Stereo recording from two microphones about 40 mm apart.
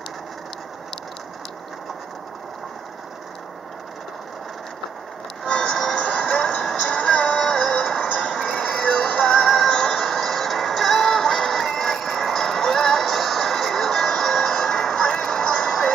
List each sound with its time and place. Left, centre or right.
5.5 s vehicle: centre
5.9 s vehicle: left
6.8 s music: left
7.4 s synthetic singing: centre
9.5 s music: centre